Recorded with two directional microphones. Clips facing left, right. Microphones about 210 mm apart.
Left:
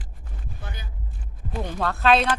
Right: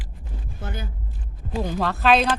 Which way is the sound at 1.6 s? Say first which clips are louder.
Right 1 dB; centre (ahead or behind).